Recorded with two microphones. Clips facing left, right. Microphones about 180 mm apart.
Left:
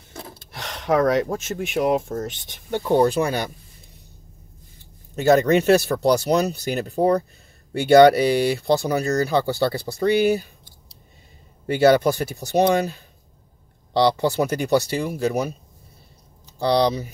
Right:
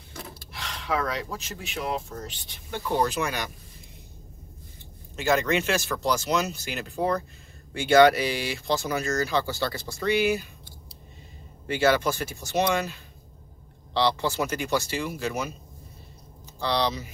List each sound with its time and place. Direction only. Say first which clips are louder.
0.5 s a sound: left 8 dB; 45° left (ahead or behind)
1.3 s speech: left 10 dB; 50° left (ahead or behind)
3.0 s speech: left 6 dB; 35° left (ahead or behind)
5.1 s speech: left 8 dB; 40° left (ahead or behind)
11.6 s speech: left 7 dB; 35° left (ahead or behind)
14.2 s speech: left 6 dB; 35° left (ahead or behind)
16.5 s speech: left 7 dB; 35° left (ahead or behind)